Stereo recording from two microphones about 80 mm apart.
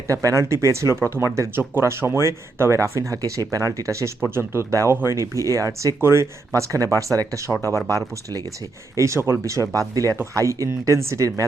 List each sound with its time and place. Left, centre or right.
0.1 s speech: right
4.7 s speech: right